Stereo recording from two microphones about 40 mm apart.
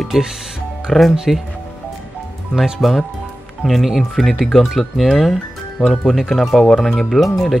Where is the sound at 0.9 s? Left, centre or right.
Centre.